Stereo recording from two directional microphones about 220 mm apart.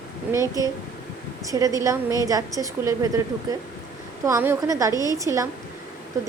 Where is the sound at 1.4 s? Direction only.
15° right (ahead or behind).